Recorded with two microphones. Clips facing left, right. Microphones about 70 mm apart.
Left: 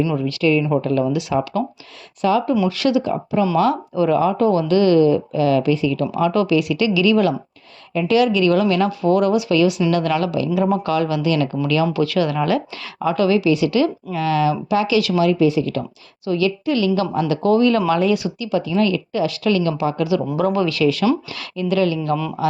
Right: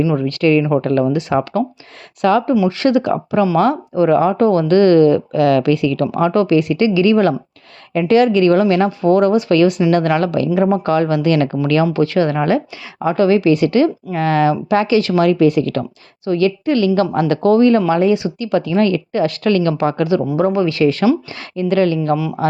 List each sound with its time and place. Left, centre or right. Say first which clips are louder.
0.2 s speech: right 4 dB; right
2.6 s a woman's voice: right 3 dB; right
2.9 s speech: right 4 dB; right
3.6 s a woman's voice: right 3 dB; right
11.9 s a woman's voice: right 3 dB; right
16.2 s a woman's voice: right 4 dB; right
18.3 s speech: right 4 dB; right
20.3 s a woman's voice: right 3 dB; right
22.1 s speech: right 4 dB; centre